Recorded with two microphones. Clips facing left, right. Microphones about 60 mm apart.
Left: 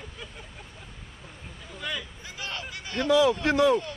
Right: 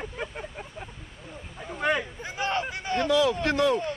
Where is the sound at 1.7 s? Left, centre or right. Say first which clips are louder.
Right 9 dB; right.